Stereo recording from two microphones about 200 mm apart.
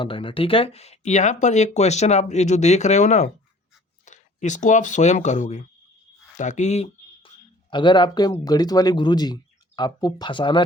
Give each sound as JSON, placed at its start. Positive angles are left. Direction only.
{"t": 0.0, "sound": "speech", "side_deg": 25}
{"t": 6.3, "sound": "a sound", "side_deg": 35}
{"t": 7.7, "sound": "speech", "side_deg": 25}